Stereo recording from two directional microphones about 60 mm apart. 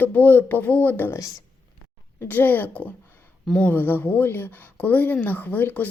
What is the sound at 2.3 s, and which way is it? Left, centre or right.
Speech, left.